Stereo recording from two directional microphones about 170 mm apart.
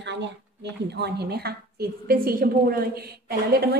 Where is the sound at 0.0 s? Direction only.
90° right.